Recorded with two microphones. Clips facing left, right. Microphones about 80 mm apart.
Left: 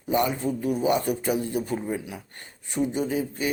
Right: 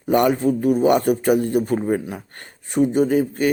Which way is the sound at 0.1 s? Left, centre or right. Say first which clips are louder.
Right 7 dB; right.